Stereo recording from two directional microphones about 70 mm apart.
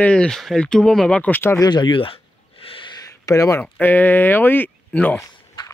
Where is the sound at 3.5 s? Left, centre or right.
Left.